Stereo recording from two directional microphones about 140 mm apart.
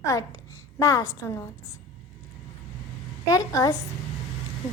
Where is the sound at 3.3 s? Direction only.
25° left (ahead or behind).